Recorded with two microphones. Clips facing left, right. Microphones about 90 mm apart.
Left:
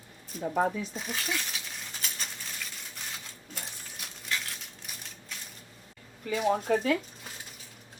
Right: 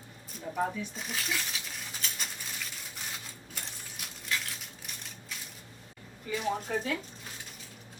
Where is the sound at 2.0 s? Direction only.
5° left (ahead or behind).